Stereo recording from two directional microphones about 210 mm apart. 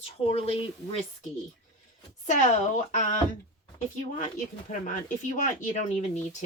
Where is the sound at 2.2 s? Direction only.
35° left (ahead or behind).